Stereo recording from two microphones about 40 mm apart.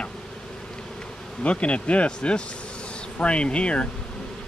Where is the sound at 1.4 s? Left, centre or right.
Left.